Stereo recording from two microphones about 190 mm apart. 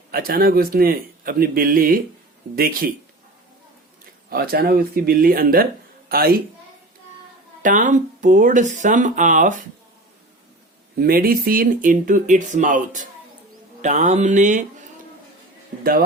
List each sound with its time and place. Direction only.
0.1 s speech: 50° right (ahead or behind)
4.3 s speech: 50° right (ahead or behind)
7.6 s speech: 40° right (ahead or behind)
10.9 s speech: 50° right (ahead or behind)
15.8 s speech: 50° right (ahead or behind)